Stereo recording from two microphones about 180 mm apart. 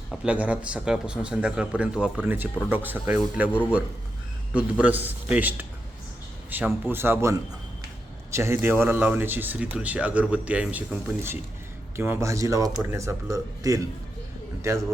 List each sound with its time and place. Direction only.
0.1 s a man's voice: 5° right (ahead or behind)
6.7 s speech: 10° right (ahead or behind)